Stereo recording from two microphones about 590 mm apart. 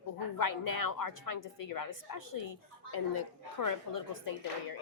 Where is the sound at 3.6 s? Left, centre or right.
Left.